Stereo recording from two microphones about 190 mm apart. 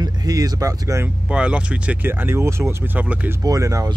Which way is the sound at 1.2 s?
5° right (ahead or behind).